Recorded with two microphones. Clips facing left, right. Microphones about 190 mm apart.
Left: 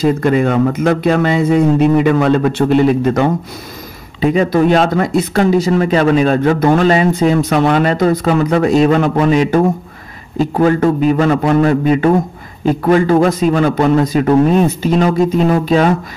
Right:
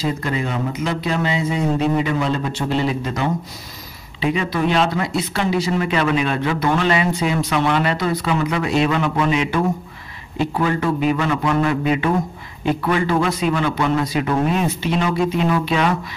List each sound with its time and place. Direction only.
0.0 s speech: 55° left (ahead or behind)
4.2 s speech: 45° left (ahead or behind)